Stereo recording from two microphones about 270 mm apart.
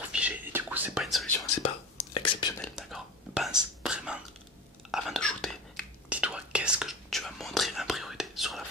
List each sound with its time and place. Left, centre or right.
0.1 s whispering: centre
2.1 s whispering: centre
2.6 s whispering: centre